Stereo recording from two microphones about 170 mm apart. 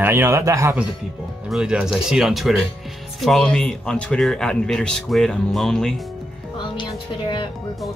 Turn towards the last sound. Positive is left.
turn(degrees=30)  # may be behind; listen again after turning